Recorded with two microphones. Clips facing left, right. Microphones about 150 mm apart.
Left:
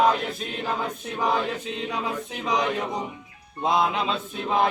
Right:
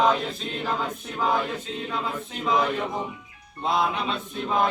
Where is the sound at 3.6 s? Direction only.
20° left (ahead or behind).